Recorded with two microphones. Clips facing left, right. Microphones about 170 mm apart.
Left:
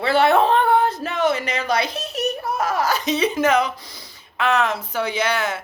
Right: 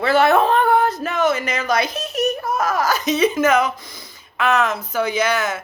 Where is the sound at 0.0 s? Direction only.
30° left (ahead or behind).